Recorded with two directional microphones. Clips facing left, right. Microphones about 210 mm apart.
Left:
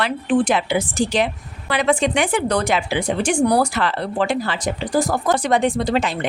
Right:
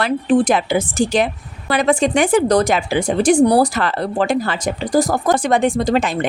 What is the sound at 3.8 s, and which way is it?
Speech, 45° right (ahead or behind).